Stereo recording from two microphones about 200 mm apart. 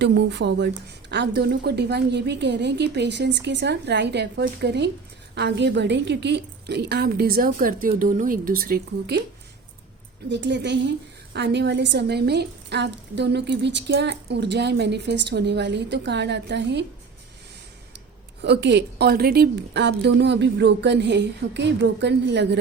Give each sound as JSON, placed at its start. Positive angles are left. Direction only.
{"t": 0.0, "sound": "a woman's voice", "side_deg": -55}
{"t": 10.2, "sound": "a woman's voice", "side_deg": -60}
{"t": 18.4, "sound": "a woman's voice", "side_deg": -60}